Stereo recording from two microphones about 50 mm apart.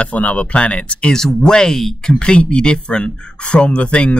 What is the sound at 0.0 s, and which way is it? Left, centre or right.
Speech, left.